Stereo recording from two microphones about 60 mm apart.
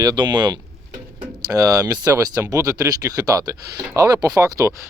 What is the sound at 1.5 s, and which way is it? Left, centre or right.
Speech, right.